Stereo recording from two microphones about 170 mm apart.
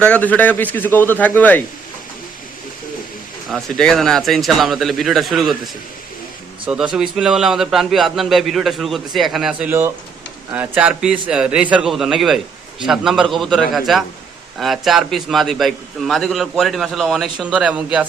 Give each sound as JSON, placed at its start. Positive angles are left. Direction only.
{"t": 0.0, "sound": "a man's voice", "side_deg": 10}
{"t": 3.5, "sound": "a man's voice", "side_deg": 0}
{"t": 6.7, "sound": "a man's voice", "side_deg": -5}